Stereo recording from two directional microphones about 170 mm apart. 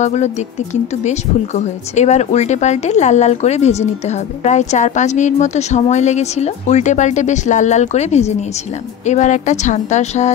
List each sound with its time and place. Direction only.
0.0 s speech: 45° left (ahead or behind)